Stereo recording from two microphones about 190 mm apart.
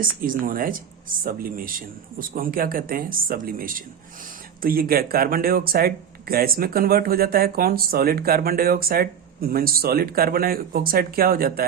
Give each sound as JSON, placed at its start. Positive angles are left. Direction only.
{"t": 0.0, "sound": "speech", "side_deg": -50}